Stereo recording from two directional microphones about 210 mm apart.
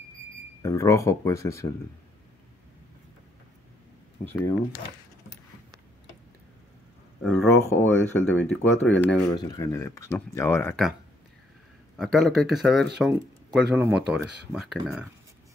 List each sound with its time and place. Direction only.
0.6 s speech: 15° left (ahead or behind)
4.3 s speech: 10° left (ahead or behind)
7.2 s speech: 10° left (ahead or behind)
12.0 s speech: centre (ahead or behind)